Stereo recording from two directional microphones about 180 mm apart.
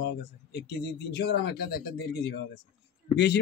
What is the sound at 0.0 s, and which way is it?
Speech, 65° left (ahead or behind).